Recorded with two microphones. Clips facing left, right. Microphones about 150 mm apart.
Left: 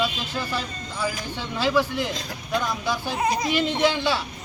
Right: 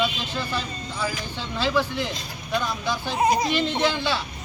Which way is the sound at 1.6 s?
10° left (ahead or behind).